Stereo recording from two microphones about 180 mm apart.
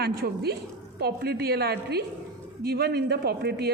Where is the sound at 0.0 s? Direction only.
60° right (ahead or behind).